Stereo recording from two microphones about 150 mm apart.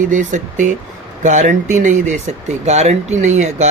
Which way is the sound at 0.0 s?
55° right (ahead or behind).